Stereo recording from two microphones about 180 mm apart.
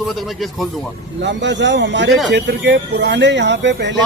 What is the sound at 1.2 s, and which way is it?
A man's voice, 75° right (ahead or behind).